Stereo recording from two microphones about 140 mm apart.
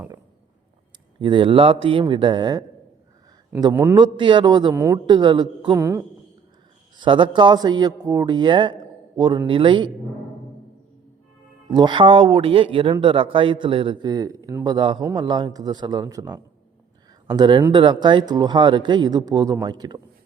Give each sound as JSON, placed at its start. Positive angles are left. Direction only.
{"t": 1.2, "sound": "speech", "side_deg": -35}
{"t": 4.7, "sound": "speech", "side_deg": -20}
{"t": 5.0, "sound": "speech", "side_deg": -35}
{"t": 5.7, "sound": "speech", "side_deg": -20}
{"t": 6.9, "sound": "speech", "side_deg": -35}
{"t": 11.7, "sound": "speech", "side_deg": -30}